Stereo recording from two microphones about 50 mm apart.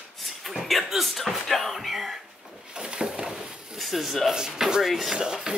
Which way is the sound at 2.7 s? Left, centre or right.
Centre.